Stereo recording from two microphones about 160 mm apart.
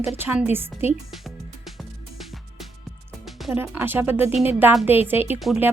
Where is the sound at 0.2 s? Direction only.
10° right (ahead or behind).